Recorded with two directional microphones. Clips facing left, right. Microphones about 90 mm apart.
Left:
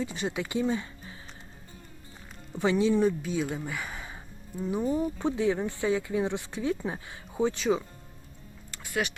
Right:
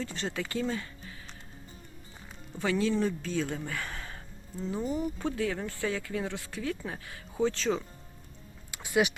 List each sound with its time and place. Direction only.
0.0 s speech: 15° left (ahead or behind)
2.6 s speech: 20° left (ahead or behind)
8.7 s a sound: 15° right (ahead or behind)